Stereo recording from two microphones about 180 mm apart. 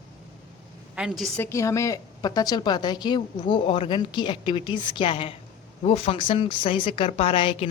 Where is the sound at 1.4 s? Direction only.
15° left (ahead or behind).